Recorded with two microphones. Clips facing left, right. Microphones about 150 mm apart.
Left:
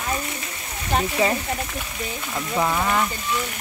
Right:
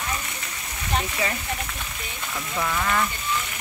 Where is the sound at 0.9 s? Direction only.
35° left (ahead or behind).